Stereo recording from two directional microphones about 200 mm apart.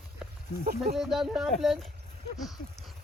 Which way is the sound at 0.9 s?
Centre (ahead or behind).